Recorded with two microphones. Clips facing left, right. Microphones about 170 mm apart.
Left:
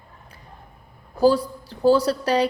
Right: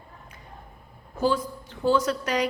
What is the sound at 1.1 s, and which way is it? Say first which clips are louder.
A woman's voice: left 7 dB; 35° left (ahead or behind).